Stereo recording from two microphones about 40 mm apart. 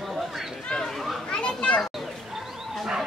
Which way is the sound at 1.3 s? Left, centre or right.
Left.